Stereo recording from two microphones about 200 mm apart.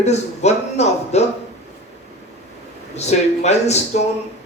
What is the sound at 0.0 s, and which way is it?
A man's voice, 35° left (ahead or behind).